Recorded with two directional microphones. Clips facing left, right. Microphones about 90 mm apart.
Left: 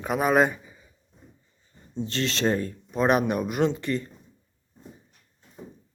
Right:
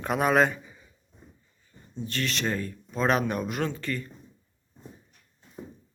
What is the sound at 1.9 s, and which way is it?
Speech, 30° left (ahead or behind).